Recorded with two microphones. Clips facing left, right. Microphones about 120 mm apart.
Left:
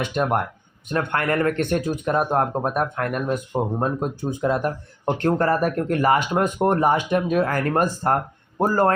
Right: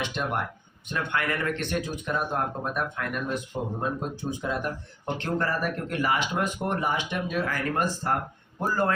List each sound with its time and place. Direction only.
0.0 s a man's voice: 50° left (ahead or behind)